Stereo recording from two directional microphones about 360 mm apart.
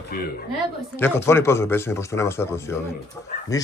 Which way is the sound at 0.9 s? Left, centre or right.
Centre.